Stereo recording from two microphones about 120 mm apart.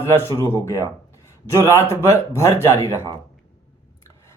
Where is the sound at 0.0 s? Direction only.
20° left (ahead or behind).